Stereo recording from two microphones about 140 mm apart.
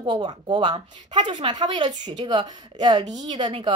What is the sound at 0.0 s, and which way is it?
A woman's voice, 30° right (ahead or behind).